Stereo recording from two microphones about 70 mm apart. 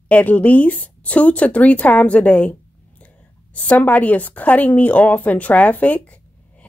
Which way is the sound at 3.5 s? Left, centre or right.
Left.